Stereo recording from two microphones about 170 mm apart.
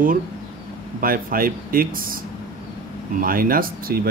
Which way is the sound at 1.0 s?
55° right (ahead or behind).